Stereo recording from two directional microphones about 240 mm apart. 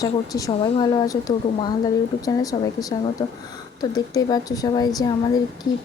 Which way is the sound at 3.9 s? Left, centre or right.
Centre.